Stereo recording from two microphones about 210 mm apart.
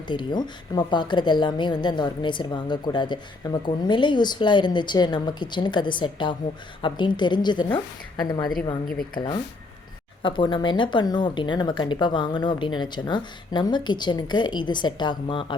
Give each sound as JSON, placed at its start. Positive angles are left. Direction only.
{"t": 0.1, "sound": "speech", "side_deg": 20}
{"t": 10.2, "sound": "speech", "side_deg": 25}